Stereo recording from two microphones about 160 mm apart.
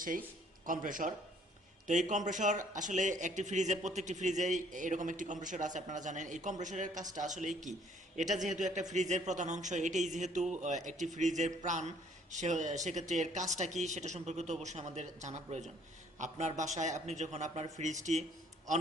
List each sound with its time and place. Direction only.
0.6 s speech: 60° right (ahead or behind)